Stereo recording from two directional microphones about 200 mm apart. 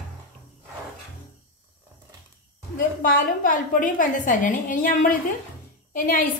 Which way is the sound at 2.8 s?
45° left (ahead or behind).